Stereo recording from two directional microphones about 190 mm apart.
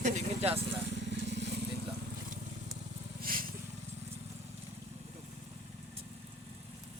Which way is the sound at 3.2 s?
50° right (ahead or behind).